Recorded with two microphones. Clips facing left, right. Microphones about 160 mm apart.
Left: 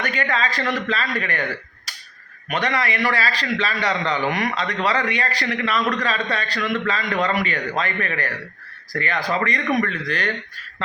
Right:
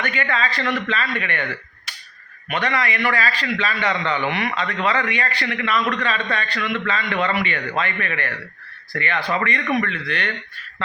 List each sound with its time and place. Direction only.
0.0 s a man's voice: 40° left (ahead or behind)